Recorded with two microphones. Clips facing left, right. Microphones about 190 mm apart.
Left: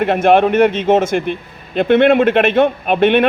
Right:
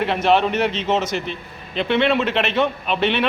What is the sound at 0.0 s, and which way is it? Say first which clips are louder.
A man's voice: left 6 dB; 50° left (ahead or behind).